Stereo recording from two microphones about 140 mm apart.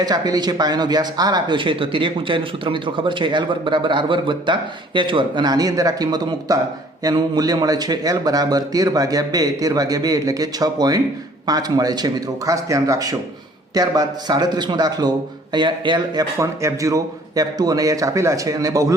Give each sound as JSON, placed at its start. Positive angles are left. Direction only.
{"t": 0.0, "sound": "a man's voice", "side_deg": -30}
{"t": 16.4, "sound": "a man's voice", "side_deg": -20}